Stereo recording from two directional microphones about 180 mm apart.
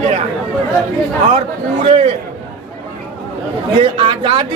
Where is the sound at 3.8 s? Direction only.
30° right (ahead or behind).